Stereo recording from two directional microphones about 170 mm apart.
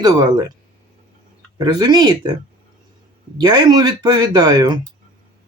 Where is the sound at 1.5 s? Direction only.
25° right (ahead or behind).